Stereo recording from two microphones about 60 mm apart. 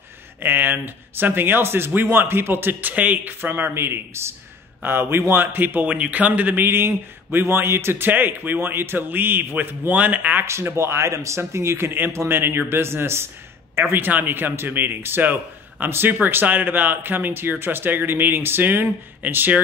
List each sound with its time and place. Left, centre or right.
0.4 s a man's voice: right
8.1 s a man's voice: right
10.4 s a man's voice: right